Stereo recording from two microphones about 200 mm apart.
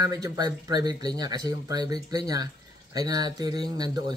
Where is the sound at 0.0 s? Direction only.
20° right (ahead or behind).